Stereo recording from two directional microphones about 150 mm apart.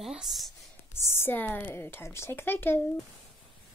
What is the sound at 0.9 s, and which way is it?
A woman's voice, 15° left (ahead or behind).